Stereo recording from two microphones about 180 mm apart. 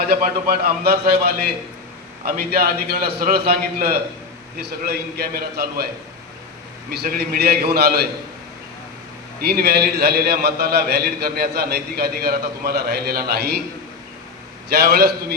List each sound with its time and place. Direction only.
0.1 s a man's voice: 55° right (ahead or behind)
7.0 s a man's voice: 60° right (ahead or behind)
9.4 s a man's voice: 60° right (ahead or behind)
14.7 s a man's voice: 60° right (ahead or behind)